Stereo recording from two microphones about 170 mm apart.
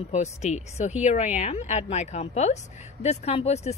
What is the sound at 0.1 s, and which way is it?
A woman's voice, 40° left (ahead or behind).